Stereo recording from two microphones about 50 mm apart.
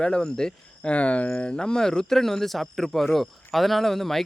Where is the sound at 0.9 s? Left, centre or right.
Left.